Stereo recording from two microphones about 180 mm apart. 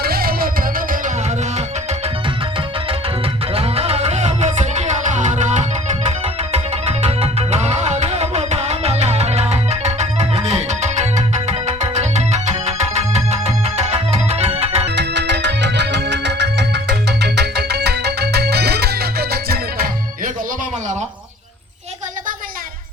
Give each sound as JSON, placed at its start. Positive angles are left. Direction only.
{"t": 0.0, "sound": "music", "side_deg": -55}
{"t": 3.5, "sound": "music", "side_deg": -35}
{"t": 14.8, "sound": "music", "side_deg": -70}